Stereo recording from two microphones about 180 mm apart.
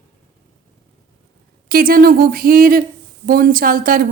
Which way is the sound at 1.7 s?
55° right (ahead or behind).